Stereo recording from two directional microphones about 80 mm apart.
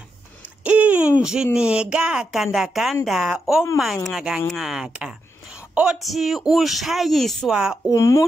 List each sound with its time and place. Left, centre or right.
0.7 s hoot: centre
1.2 s speech: centre
4.9 s a sound: centre
5.9 s speech: centre
7.5 s speech: centre
7.9 s speech: left